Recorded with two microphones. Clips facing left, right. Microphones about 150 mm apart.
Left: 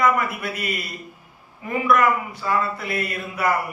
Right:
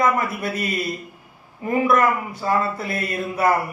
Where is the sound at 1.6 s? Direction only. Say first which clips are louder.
Right 1 dB; 40° right (ahead or behind).